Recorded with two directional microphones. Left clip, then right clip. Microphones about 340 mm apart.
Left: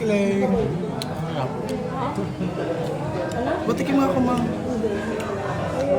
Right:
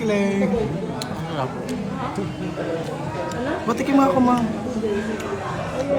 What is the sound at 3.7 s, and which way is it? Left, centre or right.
Speech, centre.